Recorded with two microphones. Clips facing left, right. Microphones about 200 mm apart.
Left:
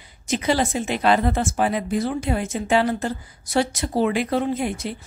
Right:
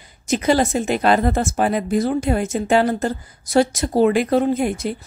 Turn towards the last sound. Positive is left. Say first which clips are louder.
# right 5 dB
turn(degrees=-45)  # may be behind; listen again after turning